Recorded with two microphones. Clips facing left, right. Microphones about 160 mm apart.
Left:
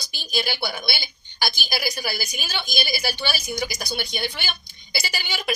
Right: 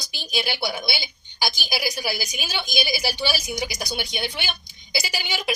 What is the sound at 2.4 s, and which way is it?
Speech, 15° right (ahead or behind).